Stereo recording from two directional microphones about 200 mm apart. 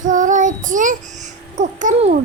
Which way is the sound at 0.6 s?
40° right (ahead or behind).